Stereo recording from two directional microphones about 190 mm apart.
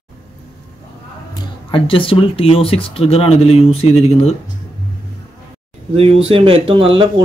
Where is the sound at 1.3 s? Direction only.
30° left (ahead or behind).